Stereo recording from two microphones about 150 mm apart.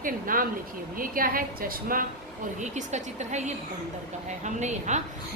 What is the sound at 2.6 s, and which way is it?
A woman's voice, 50° right (ahead or behind).